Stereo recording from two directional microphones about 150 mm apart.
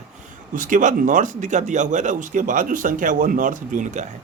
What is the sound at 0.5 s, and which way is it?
Speech, 60° right (ahead or behind).